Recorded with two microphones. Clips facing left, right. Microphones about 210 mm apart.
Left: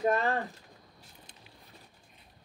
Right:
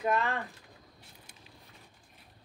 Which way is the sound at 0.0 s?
35° left (ahead or behind).